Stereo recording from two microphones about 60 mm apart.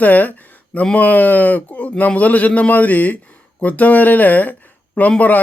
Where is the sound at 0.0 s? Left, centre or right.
Left.